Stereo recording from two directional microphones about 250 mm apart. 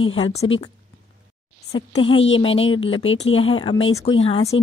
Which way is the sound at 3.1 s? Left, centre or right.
Left.